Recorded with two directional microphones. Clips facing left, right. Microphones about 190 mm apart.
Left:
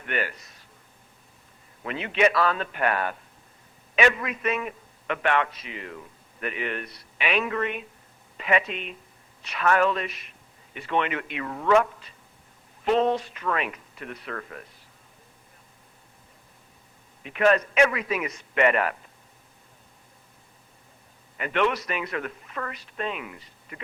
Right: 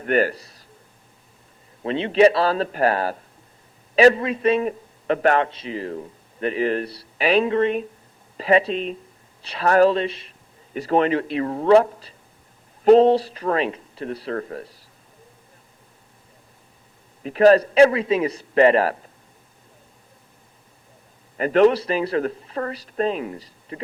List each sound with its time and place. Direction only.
0.0 s speech: 40° right (ahead or behind)
1.8 s a woman's voice: 30° right (ahead or behind)
17.2 s a woman's voice: 35° right (ahead or behind)
21.3 s a woman's voice: 35° right (ahead or behind)